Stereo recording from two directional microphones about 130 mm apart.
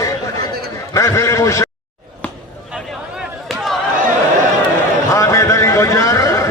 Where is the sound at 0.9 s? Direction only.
25° left (ahead or behind).